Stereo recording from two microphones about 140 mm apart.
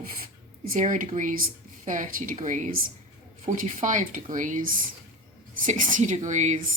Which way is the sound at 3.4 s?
75° right (ahead or behind).